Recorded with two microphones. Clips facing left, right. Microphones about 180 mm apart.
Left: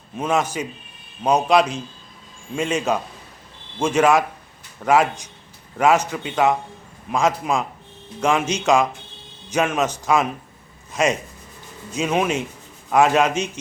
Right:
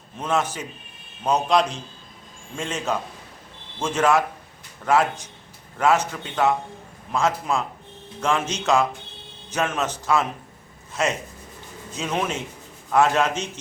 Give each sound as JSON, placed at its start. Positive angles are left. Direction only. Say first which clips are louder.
{"t": 0.2, "sound": "a man's voice", "louder": "left 3 dB", "side_deg": 15}